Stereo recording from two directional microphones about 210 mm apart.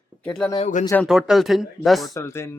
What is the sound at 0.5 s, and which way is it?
Speech, 35° left (ahead or behind).